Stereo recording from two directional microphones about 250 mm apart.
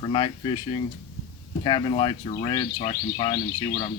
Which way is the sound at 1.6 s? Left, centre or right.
Centre.